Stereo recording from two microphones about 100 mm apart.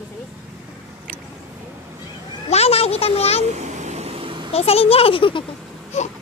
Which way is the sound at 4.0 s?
75° right (ahead or behind).